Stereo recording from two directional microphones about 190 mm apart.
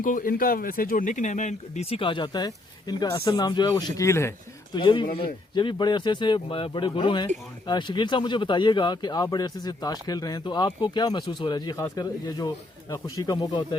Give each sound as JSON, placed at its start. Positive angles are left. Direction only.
{"t": 0.0, "sound": "speech", "side_deg": 45}
{"t": 4.8, "sound": "speech", "side_deg": 25}